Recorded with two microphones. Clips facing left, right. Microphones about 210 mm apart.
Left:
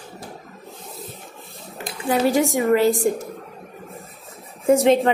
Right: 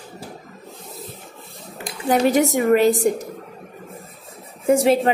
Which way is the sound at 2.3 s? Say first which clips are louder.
Right 1 dB; 20° right (ahead or behind).